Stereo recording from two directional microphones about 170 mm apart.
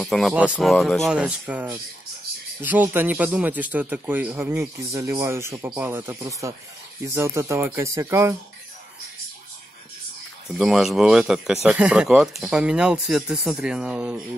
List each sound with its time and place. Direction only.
0.0 s a man's voice: centre (ahead or behind); by 8.4 s 15° right (ahead or behind)
10.5 s speech: centre (ahead or behind)